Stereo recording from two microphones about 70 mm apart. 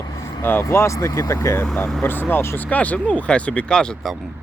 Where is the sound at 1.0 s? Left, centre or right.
Left.